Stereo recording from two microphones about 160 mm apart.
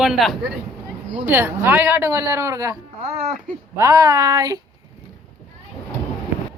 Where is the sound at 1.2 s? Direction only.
15° right (ahead or behind).